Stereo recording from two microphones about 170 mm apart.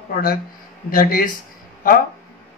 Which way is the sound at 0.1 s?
60° left (ahead or behind).